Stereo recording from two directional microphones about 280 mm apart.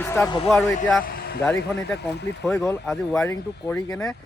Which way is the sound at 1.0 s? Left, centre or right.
Left.